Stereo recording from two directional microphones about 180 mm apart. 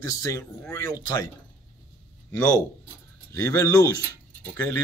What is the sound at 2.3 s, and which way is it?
Speech, 5° left (ahead or behind).